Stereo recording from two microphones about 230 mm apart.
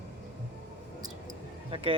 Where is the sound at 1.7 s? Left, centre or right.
Right.